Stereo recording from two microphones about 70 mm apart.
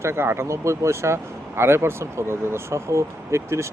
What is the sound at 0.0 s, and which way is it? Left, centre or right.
Speech, right.